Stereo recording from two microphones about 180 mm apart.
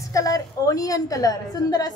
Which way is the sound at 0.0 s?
20° left (ahead or behind).